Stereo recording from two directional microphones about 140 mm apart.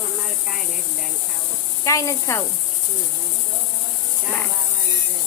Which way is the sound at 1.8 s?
20° left (ahead or behind).